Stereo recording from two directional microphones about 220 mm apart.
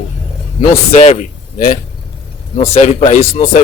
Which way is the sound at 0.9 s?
30° left (ahead or behind).